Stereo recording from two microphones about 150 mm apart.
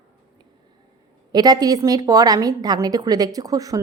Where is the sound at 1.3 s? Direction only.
25° right (ahead or behind).